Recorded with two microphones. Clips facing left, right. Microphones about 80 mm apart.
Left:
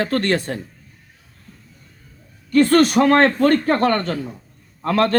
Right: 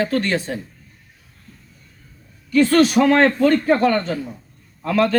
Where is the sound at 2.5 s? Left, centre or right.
Left.